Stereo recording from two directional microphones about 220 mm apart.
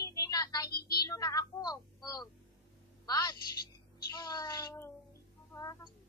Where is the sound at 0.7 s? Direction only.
45° left (ahead or behind).